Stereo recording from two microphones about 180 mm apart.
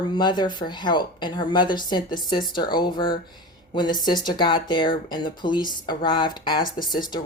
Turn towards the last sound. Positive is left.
turn(degrees=25)  # may be behind; listen again after turning